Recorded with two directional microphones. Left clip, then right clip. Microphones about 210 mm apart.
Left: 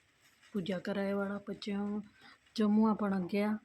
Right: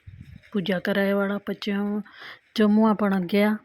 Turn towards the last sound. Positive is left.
turn(degrees=-35)  # may be behind; listen again after turning